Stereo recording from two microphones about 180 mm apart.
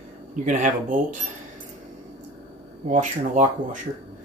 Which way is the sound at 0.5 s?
45° right (ahead or behind).